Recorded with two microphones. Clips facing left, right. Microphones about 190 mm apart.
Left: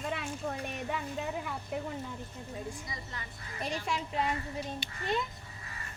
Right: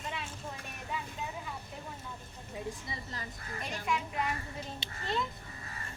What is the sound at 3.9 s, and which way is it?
Speech, 25° left (ahead or behind).